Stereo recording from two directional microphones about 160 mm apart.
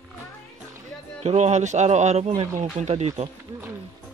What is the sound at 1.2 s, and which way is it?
Speech, 45° right (ahead or behind).